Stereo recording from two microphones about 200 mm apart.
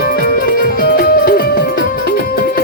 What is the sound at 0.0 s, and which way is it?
Music, 50° left (ahead or behind).